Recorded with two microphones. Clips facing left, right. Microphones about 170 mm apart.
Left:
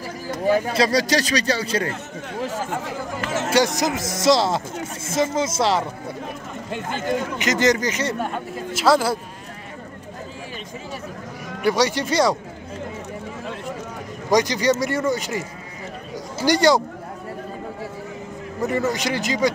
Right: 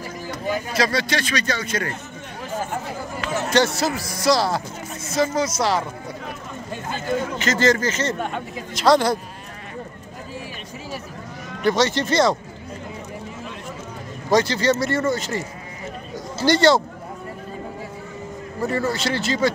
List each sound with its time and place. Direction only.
0.7 s speech: 35° left (ahead or behind)
3.4 s speech: 10° left (ahead or behind)
6.9 s speech: 15° left (ahead or behind)
11.6 s speech: 10° left (ahead or behind)
14.3 s speech: 15° left (ahead or behind)
18.6 s speech: 15° left (ahead or behind)